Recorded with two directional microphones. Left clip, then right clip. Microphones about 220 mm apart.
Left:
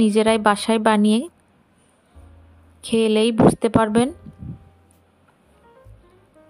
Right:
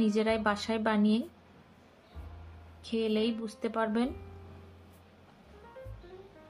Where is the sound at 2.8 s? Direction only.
45° left (ahead or behind).